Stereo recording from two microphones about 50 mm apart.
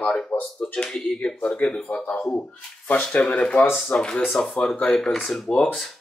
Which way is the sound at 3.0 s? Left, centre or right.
Left.